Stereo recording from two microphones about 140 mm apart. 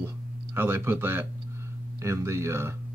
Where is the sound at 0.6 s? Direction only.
15° right (ahead or behind).